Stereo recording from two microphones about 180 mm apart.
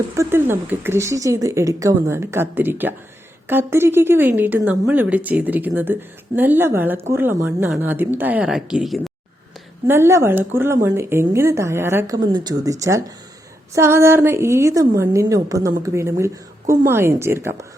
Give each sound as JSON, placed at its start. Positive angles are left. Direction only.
{"t": 0.1, "sound": "a woman's voice", "side_deg": -15}
{"t": 9.8, "sound": "a woman's voice", "side_deg": -15}